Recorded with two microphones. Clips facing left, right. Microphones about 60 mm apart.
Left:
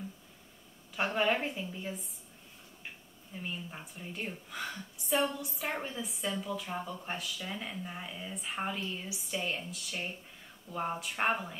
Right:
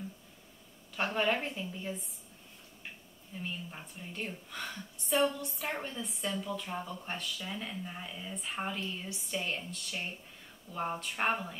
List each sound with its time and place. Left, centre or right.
0.9 s speech: centre
3.3 s speech: centre